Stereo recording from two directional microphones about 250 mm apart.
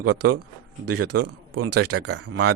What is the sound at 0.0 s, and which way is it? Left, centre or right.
A man's voice, right.